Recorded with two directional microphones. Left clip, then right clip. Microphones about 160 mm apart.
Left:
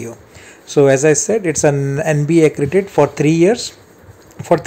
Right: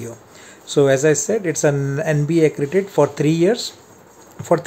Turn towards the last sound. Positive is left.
turn(degrees=5)  # may be behind; listen again after turning